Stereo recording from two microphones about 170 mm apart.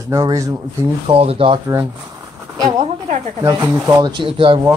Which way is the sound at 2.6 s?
20° right (ahead or behind).